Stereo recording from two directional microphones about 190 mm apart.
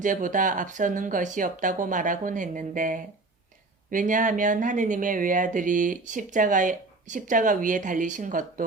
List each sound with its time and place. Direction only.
0.0 s speech: 45° right (ahead or behind)